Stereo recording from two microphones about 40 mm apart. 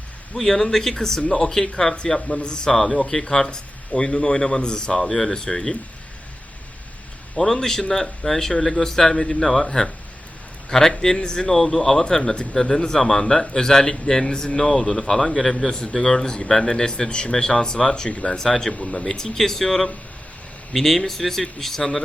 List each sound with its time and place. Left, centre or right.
0.3 s speech: centre
2.2 s speech: left
2.7 s speech: centre
7.3 s a man's voice: centre
18.7 s speech: left
19.0 s speech: centre